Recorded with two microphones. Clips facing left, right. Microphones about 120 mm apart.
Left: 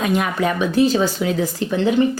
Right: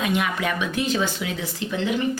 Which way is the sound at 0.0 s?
40° left (ahead or behind).